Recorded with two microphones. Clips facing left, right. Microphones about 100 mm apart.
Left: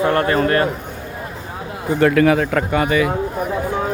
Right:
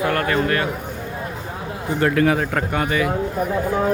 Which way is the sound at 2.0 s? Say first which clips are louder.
Left 4 dB; 90° left.